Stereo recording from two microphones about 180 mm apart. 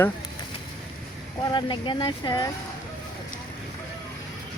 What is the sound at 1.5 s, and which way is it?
Speech, 25° left (ahead or behind).